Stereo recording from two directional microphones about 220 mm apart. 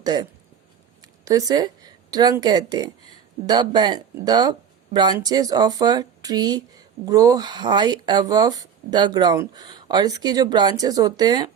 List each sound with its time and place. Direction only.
0.0 s speech: 20° right (ahead or behind)